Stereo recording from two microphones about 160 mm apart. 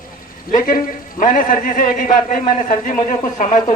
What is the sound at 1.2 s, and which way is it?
A man's voice, 55° left (ahead or behind).